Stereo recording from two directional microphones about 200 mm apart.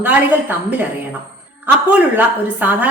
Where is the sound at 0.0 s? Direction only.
10° right (ahead or behind).